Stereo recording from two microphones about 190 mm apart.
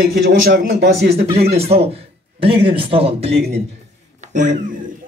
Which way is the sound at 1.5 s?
30° right (ahead or behind).